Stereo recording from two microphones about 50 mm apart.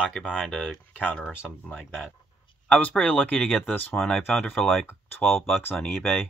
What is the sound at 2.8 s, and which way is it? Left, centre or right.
Speech, left.